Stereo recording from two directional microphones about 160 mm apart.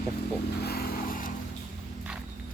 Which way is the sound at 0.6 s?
75° left (ahead or behind).